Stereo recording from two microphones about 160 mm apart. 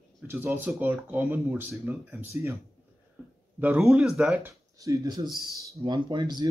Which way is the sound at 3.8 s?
5° right (ahead or behind).